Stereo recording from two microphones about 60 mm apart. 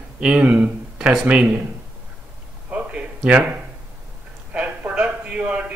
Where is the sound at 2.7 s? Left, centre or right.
Centre.